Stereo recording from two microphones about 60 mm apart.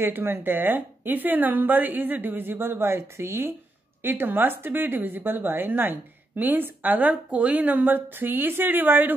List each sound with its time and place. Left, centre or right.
0.0 s speech: right